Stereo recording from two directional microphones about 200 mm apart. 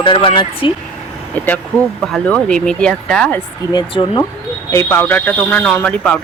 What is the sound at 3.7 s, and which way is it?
Speech, 20° left (ahead or behind).